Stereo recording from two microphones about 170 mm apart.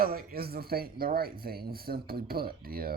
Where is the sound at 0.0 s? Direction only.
60° right (ahead or behind).